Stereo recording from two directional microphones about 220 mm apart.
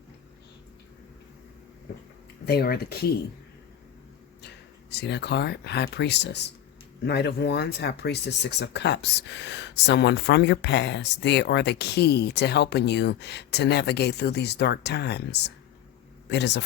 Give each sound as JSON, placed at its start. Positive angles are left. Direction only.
{"t": 2.5, "sound": "speech", "side_deg": 45}
{"t": 4.4, "sound": "speech", "side_deg": 50}